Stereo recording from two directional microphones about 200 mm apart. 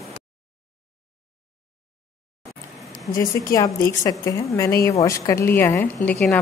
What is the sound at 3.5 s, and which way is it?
A woman's voice, 15° left (ahead or behind).